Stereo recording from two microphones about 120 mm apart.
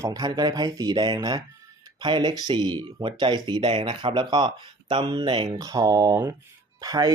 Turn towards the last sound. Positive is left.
turn(degrees=-30)  # may be behind; listen again after turning